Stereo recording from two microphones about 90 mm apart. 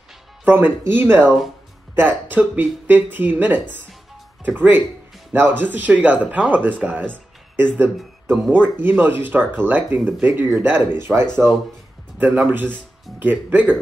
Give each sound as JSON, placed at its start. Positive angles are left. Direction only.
{"t": 0.5, "sound": "speech", "side_deg": -20}